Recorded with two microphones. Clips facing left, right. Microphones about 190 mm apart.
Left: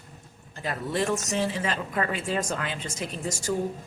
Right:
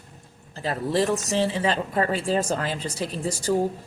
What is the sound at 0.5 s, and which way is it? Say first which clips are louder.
Speech: right 5 dB; 30° right (ahead or behind).